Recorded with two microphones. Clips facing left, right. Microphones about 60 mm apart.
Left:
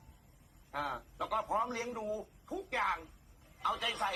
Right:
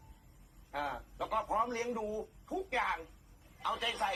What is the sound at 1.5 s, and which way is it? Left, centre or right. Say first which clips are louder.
Speech: right 2 dB; right.